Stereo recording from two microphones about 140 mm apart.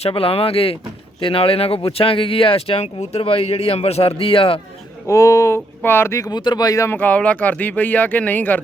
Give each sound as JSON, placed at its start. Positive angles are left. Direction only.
{"t": 0.0, "sound": "speech", "side_deg": 40}
{"t": 5.0, "sound": "speech", "side_deg": 25}